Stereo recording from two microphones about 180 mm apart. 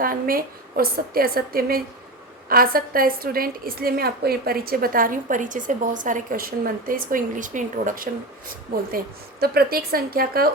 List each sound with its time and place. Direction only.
0.0 s a woman's voice: 55° right (ahead or behind)
9.4 s a woman's voice: 60° right (ahead or behind)